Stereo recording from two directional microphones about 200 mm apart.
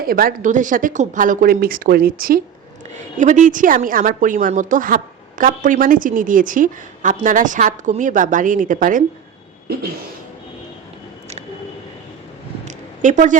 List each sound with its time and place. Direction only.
0.0 s a woman's voice: 45° right (ahead or behind)
12.6 s zipper: 40° right (ahead or behind)